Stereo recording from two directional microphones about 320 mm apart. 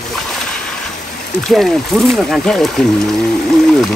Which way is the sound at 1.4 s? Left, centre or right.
Centre.